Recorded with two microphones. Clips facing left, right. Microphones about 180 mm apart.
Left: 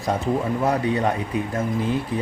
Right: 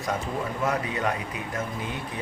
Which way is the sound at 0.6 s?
30° left (ahead or behind).